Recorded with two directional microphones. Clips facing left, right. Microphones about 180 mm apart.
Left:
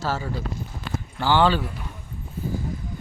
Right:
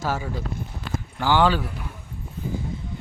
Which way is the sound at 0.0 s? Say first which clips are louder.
Even; 15° right (ahead or behind).